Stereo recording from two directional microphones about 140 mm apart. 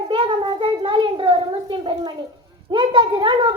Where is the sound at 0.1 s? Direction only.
35° right (ahead or behind).